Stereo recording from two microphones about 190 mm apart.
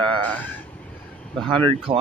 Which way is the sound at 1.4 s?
25° right (ahead or behind).